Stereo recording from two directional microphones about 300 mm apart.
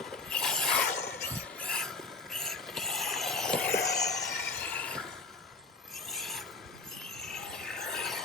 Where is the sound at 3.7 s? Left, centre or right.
Left.